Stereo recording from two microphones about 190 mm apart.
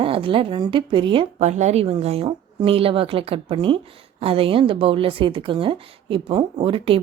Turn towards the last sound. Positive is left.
turn(degrees=-30)  # may be behind; listen again after turning